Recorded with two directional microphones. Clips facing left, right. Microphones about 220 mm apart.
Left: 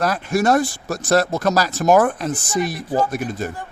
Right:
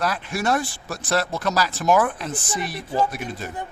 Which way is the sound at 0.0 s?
45° left (ahead or behind).